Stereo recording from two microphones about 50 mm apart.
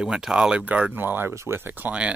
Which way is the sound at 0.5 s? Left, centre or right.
Right.